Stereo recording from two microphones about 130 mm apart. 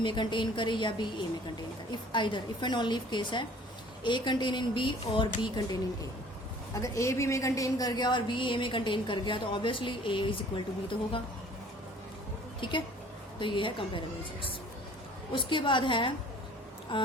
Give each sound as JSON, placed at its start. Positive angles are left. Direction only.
{"t": 0.0, "sound": "a woman's voice", "side_deg": 35}
{"t": 6.7, "sound": "a woman's voice", "side_deg": 25}
{"t": 12.5, "sound": "a woman's voice", "side_deg": 40}
{"t": 15.3, "sound": "a woman's voice", "side_deg": 40}